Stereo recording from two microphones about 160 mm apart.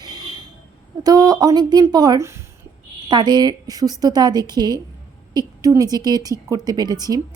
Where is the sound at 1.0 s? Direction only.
25° right (ahead or behind).